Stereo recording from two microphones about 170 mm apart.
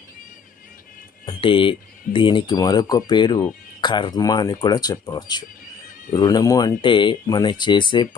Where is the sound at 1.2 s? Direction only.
25° left (ahead or behind).